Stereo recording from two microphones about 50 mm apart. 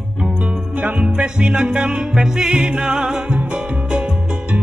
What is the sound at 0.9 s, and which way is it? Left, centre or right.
Music, centre.